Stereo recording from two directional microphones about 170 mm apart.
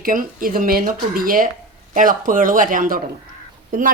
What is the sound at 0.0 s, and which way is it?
A woman's voice, 55° right (ahead or behind).